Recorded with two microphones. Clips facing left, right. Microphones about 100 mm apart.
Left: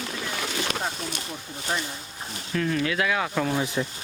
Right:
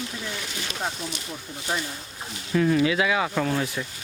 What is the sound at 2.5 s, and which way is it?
Speech, 10° right (ahead or behind).